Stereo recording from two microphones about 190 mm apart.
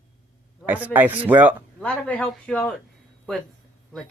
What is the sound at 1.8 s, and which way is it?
Speech, 10° left (ahead or behind).